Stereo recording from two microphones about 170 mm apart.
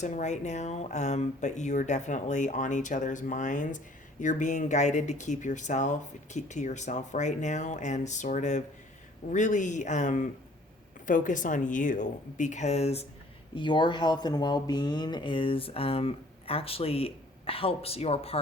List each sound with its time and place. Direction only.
0.0 s speech: 45° left (ahead or behind)
13.6 s speech: 25° left (ahead or behind)